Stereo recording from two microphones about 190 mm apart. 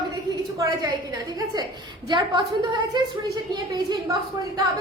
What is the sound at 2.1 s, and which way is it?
Speech, 25° right (ahead or behind).